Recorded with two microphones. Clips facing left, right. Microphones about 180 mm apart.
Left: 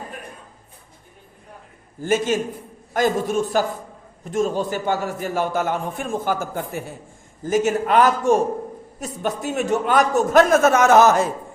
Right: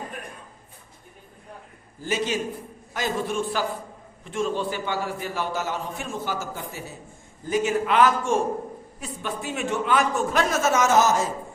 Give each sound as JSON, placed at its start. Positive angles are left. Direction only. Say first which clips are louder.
{"t": 2.0, "sound": "a man's voice", "louder": "left 6 dB", "side_deg": 50}